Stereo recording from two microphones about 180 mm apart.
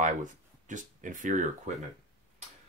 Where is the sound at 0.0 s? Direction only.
45° right (ahead or behind).